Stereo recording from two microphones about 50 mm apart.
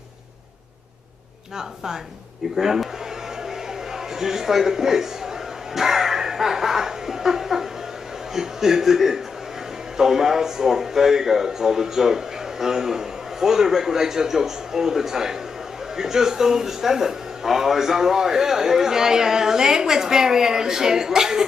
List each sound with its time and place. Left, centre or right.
2.5 s a man's voice: centre
4.2 s a man's voice: centre